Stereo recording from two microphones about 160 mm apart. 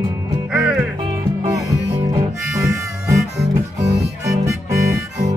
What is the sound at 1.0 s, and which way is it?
Music, 30° right (ahead or behind).